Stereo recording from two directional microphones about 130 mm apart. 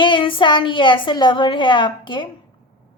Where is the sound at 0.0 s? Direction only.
40° left (ahead or behind).